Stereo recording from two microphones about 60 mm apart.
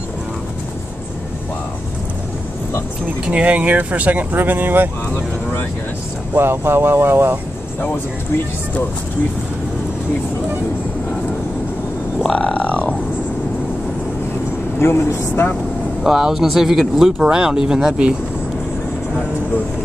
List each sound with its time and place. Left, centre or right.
3.3 s speech: right
5.1 s speech: left
6.3 s speech: right
12.3 s a sound: centre
14.8 s speech: left
16.0 s speech: centre